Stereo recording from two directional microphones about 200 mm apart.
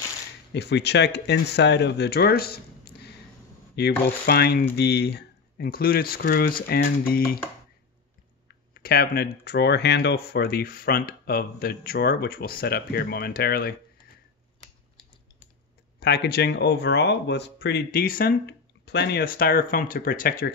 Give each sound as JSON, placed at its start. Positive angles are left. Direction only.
{"t": 0.5, "sound": "speech", "side_deg": 60}
{"t": 8.7, "sound": "speech", "side_deg": 50}
{"t": 16.0, "sound": "speech", "side_deg": 55}